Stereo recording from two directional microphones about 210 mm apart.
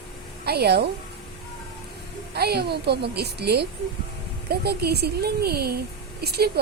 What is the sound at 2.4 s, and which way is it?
Speech, 50° right (ahead or behind).